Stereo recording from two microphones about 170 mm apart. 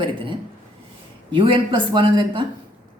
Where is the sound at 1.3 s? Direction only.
30° right (ahead or behind).